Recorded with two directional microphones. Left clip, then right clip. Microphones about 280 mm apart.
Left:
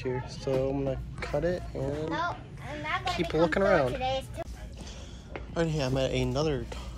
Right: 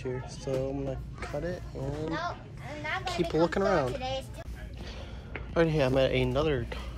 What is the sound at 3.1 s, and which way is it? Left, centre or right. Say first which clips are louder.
Speech: left 1 dB; centre.